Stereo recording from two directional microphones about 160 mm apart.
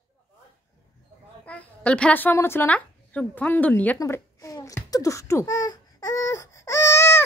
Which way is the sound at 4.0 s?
20° left (ahead or behind).